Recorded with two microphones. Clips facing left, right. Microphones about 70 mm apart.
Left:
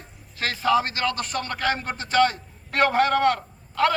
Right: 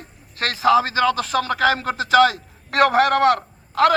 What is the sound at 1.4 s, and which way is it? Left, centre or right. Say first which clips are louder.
A man's voice: right 7 dB; right.